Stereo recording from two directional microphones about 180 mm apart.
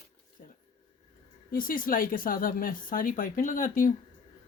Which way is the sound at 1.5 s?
50° left (ahead or behind).